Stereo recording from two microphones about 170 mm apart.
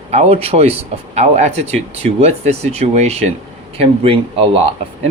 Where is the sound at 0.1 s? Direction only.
40° right (ahead or behind).